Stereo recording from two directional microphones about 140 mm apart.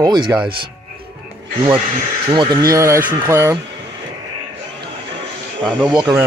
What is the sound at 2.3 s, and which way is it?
Speech, 30° right (ahead or behind).